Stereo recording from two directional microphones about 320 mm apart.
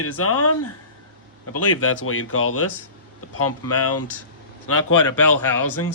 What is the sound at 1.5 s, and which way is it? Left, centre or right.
Speech, left.